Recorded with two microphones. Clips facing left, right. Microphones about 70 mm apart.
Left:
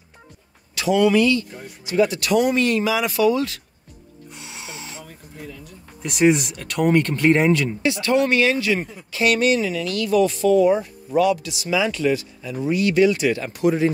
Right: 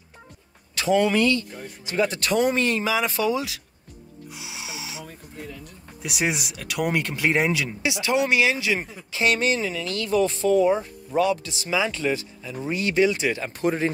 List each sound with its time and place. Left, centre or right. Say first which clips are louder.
0.7 s speech: left 3 dB; right
3.3 s speech: left 4 dB; centre
4.4 s music: even; centre
6.0 s speech: left 9 dB; centre
9.2 s speech: left 4 dB; right
13.5 s speech: left 6 dB; right